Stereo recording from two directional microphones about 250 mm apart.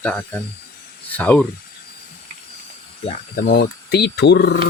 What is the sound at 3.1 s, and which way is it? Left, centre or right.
Speech, left.